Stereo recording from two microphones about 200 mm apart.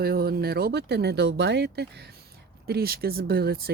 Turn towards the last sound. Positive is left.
turn(degrees=-50)  # may be behind; listen again after turning